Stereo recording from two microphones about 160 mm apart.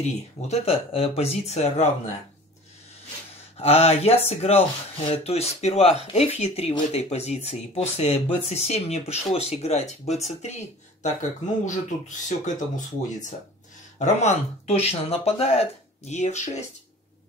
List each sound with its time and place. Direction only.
0.0 s speech: 40° left (ahead or behind)
3.5 s speech: 40° left (ahead or behind)
11.6 s speech: 50° left (ahead or behind)